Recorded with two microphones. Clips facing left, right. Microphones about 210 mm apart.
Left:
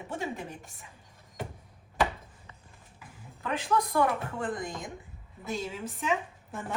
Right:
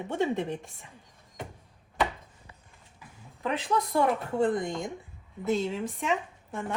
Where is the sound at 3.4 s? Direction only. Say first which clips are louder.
Right 1 dB; 25° right (ahead or behind).